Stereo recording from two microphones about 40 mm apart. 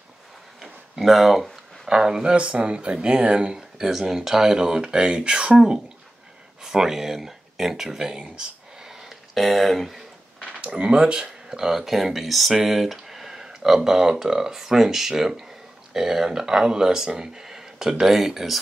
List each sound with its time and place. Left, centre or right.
0.6 s a sound: centre
1.9 s speech: centre
2.3 s speech: right
3.5 s speech: centre
8.1 s speech: right
9.3 s speech: centre
10.6 s speech: right; by 12.5 s centre
12.5 s a sound: centre
13.7 s speech: centre